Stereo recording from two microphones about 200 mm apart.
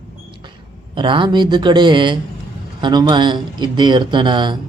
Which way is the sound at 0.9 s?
25° right (ahead or behind).